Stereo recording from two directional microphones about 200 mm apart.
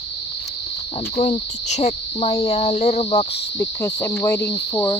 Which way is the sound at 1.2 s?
35° left (ahead or behind).